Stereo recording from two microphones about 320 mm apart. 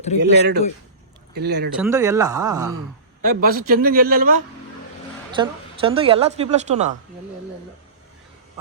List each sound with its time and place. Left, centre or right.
0.2 s a man's voice: right
1.7 s speech: centre
3.2 s a woman's voice: right
5.3 s a woman's voice: centre